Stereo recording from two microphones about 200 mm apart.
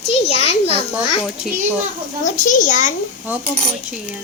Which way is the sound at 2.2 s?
40° left (ahead or behind).